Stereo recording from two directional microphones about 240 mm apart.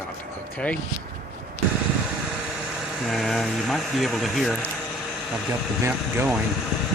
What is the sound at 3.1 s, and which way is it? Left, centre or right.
Speech, centre.